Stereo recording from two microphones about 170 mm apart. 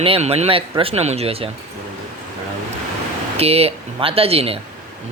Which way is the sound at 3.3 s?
35° right (ahead or behind).